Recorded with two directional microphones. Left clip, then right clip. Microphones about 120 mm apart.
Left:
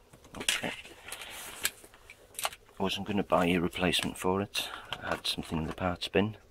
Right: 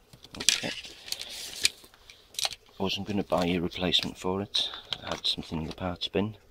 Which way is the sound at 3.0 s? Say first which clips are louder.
Left 2 dB; 35° right (ahead or behind).